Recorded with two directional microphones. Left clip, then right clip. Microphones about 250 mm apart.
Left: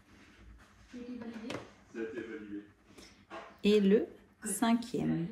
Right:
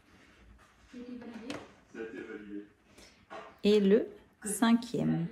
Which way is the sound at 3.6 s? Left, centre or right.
Centre.